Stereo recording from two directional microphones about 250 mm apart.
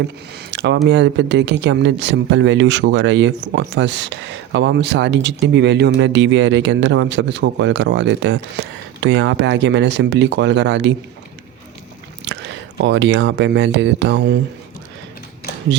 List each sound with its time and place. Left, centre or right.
0.5 s a sound: right
0.9 s speech: right
12.2 s speech: right